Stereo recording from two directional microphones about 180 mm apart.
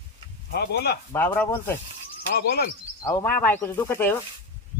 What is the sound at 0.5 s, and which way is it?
Speech, 65° left (ahead or behind).